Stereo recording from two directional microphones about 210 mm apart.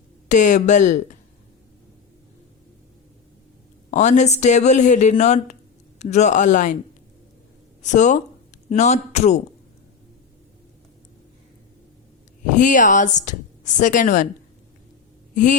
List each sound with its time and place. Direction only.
0.3 s speech: 35° left (ahead or behind)
3.9 s speech: 35° left (ahead or behind)
7.8 s speech: 35° left (ahead or behind)
12.5 s speech: 40° left (ahead or behind)